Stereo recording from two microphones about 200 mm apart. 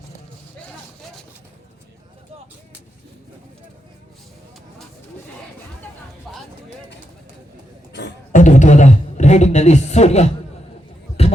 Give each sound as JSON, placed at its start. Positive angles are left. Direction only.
{"t": 6.3, "sound": "a sound", "side_deg": 0}
{"t": 8.3, "sound": "beatboxing", "side_deg": 40}
{"t": 11.2, "sound": "music", "side_deg": 30}